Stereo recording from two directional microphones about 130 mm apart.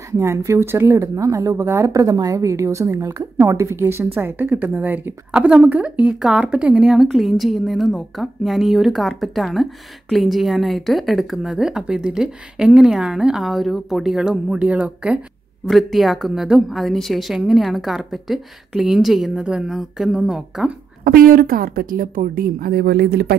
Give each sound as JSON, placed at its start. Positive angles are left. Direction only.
{"t": 0.2, "sound": "speech", "side_deg": -20}
{"t": 21.0, "sound": "speech", "side_deg": -90}